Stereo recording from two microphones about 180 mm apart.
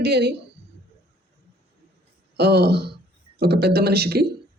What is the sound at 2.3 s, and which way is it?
Speech, 65° right (ahead or behind).